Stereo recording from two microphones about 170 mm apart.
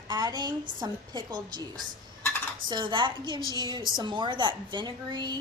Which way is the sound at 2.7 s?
25° right (ahead or behind).